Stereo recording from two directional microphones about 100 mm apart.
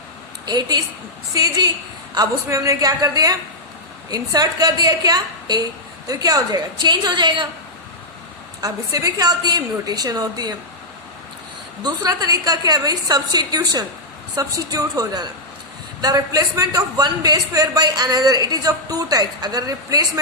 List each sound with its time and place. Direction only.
0.4 s a woman's voice: 45° right (ahead or behind)
8.6 s a man's voice: 35° right (ahead or behind)
11.8 s a man's voice: 40° right (ahead or behind)